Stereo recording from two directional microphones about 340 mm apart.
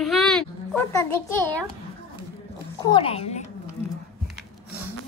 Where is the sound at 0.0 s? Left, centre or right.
Centre.